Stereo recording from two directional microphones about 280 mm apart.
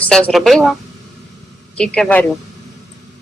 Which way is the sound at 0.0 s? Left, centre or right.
Centre.